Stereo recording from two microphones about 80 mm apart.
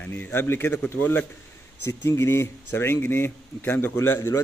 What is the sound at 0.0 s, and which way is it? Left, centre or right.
A man's voice, left.